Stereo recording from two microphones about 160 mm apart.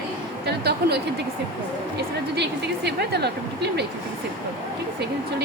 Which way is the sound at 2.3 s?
90° right.